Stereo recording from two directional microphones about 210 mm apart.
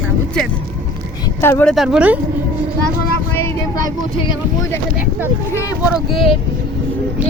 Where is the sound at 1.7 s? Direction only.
5° right (ahead or behind).